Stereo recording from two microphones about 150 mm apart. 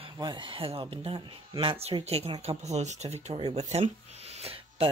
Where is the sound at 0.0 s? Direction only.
30° right (ahead or behind).